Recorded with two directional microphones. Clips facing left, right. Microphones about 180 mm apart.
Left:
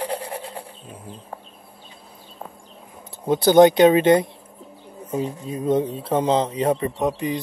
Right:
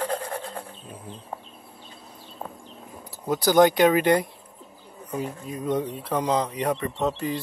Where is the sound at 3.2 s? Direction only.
25° left (ahead or behind).